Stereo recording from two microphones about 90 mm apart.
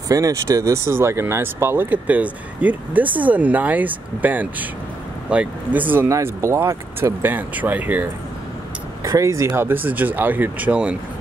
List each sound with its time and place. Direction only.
0.1 s speech: 40° right (ahead or behind); by 6.0 s 20° right (ahead or behind)
6.0 s speech: 35° right (ahead or behind)
9.0 s speech: 35° right (ahead or behind)
9.6 s speech: 20° right (ahead or behind)